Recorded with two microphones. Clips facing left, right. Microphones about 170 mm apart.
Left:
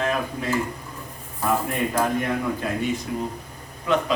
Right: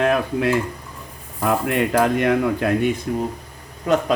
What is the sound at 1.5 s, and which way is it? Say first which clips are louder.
Speech: right 4 dB; 85° right.